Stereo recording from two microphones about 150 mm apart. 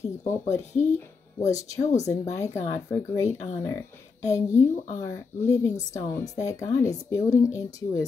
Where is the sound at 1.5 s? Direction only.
20° left (ahead or behind).